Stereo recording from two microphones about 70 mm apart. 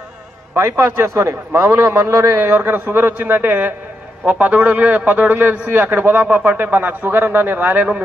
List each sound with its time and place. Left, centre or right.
0.6 s a man's voice: right